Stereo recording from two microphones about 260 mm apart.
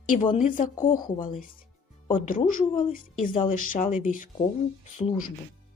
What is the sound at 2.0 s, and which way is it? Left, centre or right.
Speech, left.